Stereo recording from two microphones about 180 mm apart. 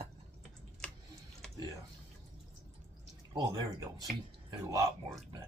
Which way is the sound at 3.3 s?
20° right (ahead or behind).